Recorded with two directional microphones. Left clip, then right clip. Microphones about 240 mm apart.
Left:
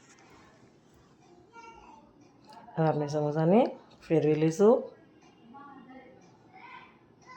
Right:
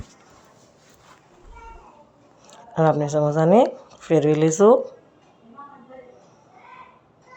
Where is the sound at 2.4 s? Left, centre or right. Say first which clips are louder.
Right 10 dB; centre.